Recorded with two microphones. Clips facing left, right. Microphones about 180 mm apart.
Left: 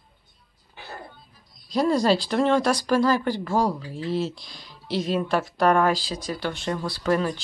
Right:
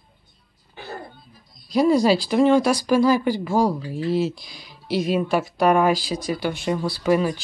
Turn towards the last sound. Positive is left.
turn(degrees=-10)  # may be behind; listen again after turning